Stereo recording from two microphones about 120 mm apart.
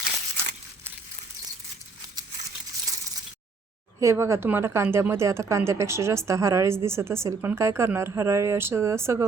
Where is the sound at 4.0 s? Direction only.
25° right (ahead or behind).